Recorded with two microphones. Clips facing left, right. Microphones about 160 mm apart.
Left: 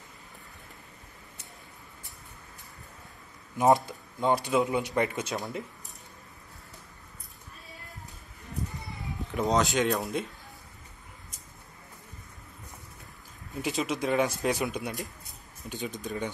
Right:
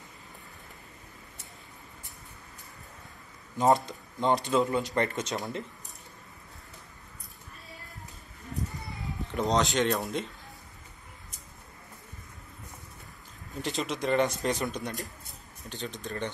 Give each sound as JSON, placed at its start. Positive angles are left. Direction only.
{"t": 3.5, "sound": "speech", "side_deg": 15}
{"t": 3.8, "sound": "speech", "side_deg": 5}
{"t": 4.6, "sound": "speech", "side_deg": 15}
{"t": 9.3, "sound": "speech", "side_deg": 0}
{"t": 13.6, "sound": "speech", "side_deg": 5}